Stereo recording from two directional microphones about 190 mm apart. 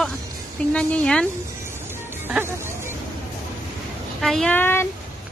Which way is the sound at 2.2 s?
10° right (ahead or behind).